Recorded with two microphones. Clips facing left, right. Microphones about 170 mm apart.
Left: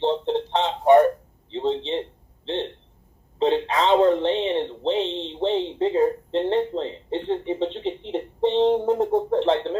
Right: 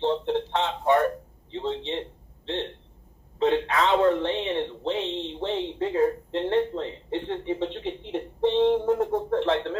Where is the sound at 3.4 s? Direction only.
20° left (ahead or behind).